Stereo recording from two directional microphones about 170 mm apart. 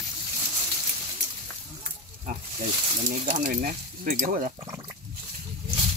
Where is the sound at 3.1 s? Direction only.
50° right (ahead or behind).